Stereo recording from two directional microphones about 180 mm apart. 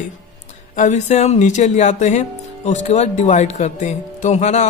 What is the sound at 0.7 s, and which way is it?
Speech, 40° left (ahead or behind).